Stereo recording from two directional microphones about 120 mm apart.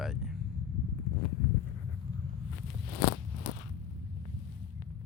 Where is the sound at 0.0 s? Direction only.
5° right (ahead or behind).